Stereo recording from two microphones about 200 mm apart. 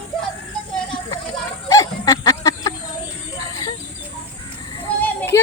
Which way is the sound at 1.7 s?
15° left (ahead or behind).